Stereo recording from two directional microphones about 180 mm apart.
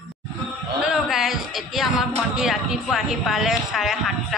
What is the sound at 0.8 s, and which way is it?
Speech, centre (ahead or behind).